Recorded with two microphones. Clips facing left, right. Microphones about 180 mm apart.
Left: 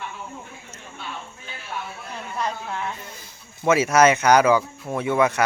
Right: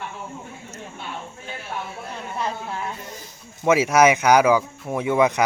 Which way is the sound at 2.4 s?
5° right (ahead or behind).